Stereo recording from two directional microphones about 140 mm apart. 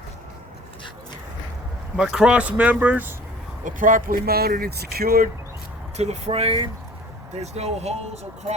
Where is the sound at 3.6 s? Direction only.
75° right (ahead or behind); by 5.3 s 90° right.